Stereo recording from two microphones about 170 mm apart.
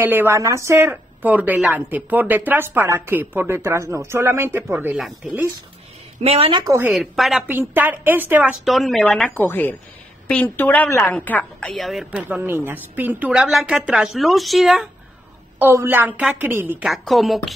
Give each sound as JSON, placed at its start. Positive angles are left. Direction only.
{"t": 0.0, "sound": "a woman's voice", "side_deg": -10}
{"t": 6.2, "sound": "a woman's voice", "side_deg": -35}
{"t": 6.7, "sound": "a woman's voice", "side_deg": -10}
{"t": 7.4, "sound": "a woman's voice", "side_deg": -10}
{"t": 15.6, "sound": "a woman's voice", "side_deg": -15}
{"t": 16.9, "sound": "a woman's voice", "side_deg": 0}